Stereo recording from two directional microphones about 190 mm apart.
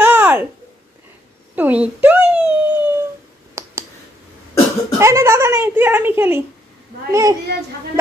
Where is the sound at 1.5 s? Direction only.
10° right (ahead or behind).